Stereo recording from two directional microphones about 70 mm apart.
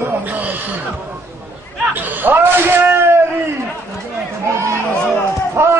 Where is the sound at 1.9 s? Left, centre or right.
Right.